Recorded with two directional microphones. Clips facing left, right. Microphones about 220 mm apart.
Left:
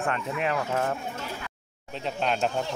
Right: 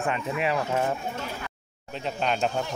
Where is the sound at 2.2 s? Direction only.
Centre (ahead or behind).